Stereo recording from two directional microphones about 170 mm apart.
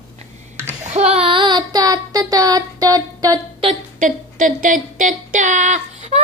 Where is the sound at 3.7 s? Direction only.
50° right (ahead or behind).